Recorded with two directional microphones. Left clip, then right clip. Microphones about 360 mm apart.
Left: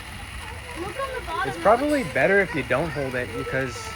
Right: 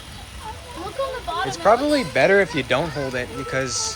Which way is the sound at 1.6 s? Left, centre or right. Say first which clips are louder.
Right 2 dB; centre.